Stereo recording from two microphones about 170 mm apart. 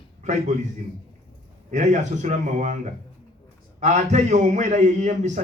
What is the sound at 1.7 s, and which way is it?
A man's voice, 45° right (ahead or behind).